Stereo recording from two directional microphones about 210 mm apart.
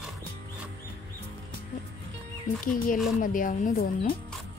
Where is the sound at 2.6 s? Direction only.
40° left (ahead or behind).